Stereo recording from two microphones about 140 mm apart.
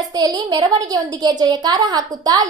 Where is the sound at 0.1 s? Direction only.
30° right (ahead or behind).